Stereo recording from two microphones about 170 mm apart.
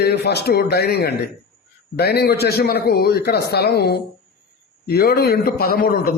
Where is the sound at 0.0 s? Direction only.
75° left (ahead or behind).